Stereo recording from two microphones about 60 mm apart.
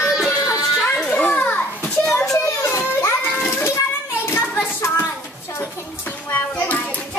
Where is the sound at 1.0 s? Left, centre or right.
Left.